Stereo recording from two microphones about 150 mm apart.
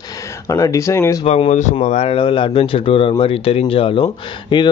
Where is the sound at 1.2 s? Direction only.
45° left (ahead or behind).